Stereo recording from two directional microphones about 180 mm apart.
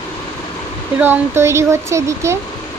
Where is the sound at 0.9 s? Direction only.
10° right (ahead or behind).